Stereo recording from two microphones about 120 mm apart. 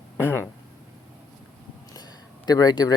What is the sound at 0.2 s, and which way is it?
Speech, 15° left (ahead or behind).